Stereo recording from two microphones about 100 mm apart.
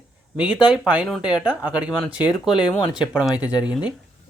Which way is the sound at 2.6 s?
55° left (ahead or behind).